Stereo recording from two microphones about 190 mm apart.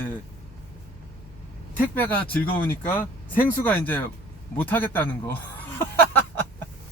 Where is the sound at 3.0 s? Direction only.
50° left (ahead or behind).